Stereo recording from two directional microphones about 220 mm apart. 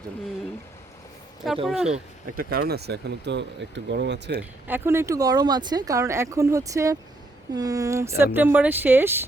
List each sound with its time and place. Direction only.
1.6 s speech: centre (ahead or behind)
1.9 s speech: 40° right (ahead or behind)
4.7 s speech: 10° right (ahead or behind)